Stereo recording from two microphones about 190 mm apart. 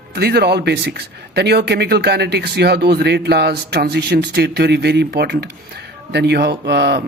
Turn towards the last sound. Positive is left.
turn(degrees=-60)  # may be behind; listen again after turning